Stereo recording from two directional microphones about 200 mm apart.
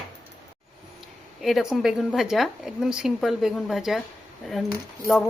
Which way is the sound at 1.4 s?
Centre (ahead or behind).